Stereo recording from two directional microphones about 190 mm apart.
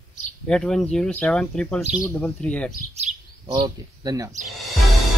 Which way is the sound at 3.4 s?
20° right (ahead or behind).